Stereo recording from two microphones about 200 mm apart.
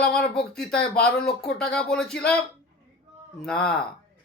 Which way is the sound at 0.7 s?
5° left (ahead or behind).